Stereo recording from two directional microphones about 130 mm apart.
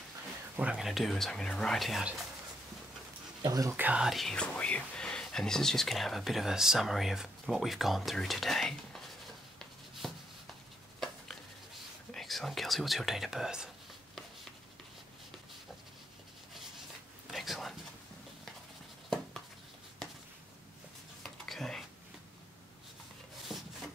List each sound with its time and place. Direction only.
0.6 s speech: 5° right (ahead or behind)
3.4 s speech: 30° right (ahead or behind)
3.7 s speech: 10° right (ahead or behind)
9.6 s writing: centre (ahead or behind)
11.0 s whispering: centre (ahead or behind)
17.3 s whispering: centre (ahead or behind)
21.2 s a sound: 5° left (ahead or behind)
23.5 s rub: centre (ahead or behind)